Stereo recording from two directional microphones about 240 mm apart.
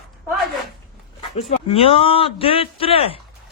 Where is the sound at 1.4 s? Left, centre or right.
Left.